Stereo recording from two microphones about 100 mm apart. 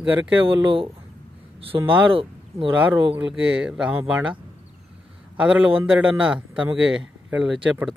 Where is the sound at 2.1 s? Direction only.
65° right (ahead or behind).